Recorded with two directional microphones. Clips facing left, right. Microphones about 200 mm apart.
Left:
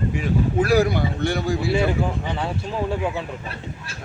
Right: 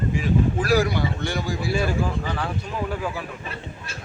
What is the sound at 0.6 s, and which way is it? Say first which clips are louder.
Speech: left 2 dB; 55° left (ahead or behind).